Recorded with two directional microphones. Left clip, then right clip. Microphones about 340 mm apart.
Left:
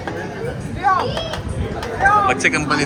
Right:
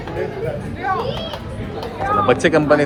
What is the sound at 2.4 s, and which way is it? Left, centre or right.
Speech, centre.